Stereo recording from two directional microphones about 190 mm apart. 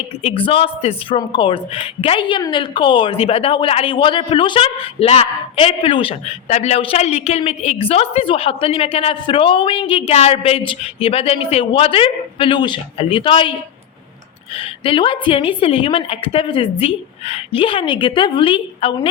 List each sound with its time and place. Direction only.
0.2 s speech: 30° left (ahead or behind)
14.5 s speech: 30° left (ahead or behind)